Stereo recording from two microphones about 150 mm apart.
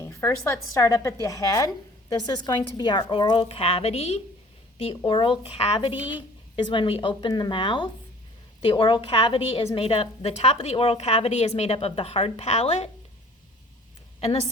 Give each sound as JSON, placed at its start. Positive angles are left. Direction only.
{"t": 0.0, "sound": "a woman's voice", "side_deg": 15}